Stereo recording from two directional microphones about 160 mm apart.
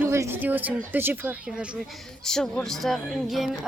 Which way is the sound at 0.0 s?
15° right (ahead or behind).